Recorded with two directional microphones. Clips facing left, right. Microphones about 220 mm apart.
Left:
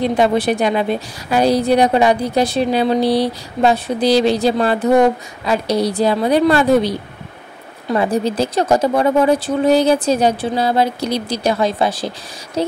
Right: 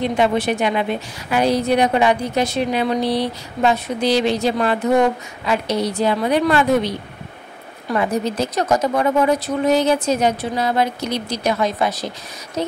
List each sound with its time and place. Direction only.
0.0 s a woman's voice: 35° left (ahead or behind)